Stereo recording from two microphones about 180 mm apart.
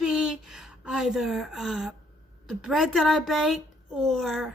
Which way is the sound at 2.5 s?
Centre (ahead or behind).